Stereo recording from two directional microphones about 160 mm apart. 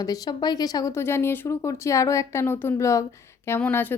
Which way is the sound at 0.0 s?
25° left (ahead or behind).